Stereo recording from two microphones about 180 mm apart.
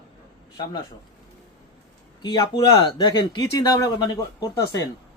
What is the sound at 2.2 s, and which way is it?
Speech, 25° left (ahead or behind).